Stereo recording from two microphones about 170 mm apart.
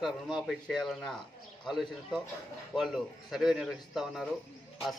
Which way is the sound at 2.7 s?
Centre (ahead or behind).